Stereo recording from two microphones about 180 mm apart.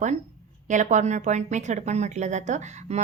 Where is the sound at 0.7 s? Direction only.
45° right (ahead or behind).